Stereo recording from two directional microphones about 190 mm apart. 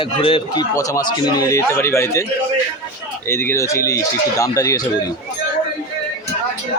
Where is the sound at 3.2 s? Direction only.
10° left (ahead or behind).